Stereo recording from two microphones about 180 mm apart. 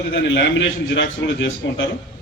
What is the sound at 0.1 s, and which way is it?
A man's voice, 80° left.